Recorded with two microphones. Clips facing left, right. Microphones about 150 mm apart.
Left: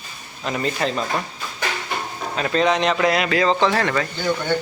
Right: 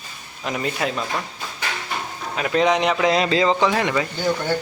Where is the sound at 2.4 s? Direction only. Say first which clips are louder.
Even; 10° right (ahead or behind).